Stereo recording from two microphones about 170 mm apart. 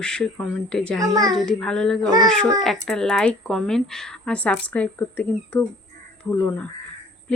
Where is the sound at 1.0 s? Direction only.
20° right (ahead or behind).